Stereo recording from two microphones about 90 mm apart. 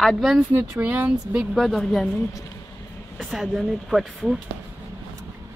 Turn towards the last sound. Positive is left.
turn(degrees=-5)  # may be behind; listen again after turning